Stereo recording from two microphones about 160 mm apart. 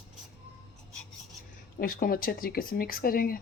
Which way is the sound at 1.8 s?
65° left (ahead or behind).